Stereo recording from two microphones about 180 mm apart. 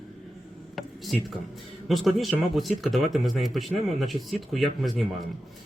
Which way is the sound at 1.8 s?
Centre (ahead or behind).